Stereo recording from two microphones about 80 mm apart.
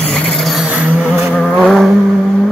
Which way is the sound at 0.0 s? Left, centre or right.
Centre.